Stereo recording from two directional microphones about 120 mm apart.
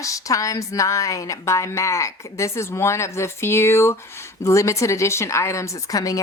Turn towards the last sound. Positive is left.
turn(degrees=30)  # may be behind; listen again after turning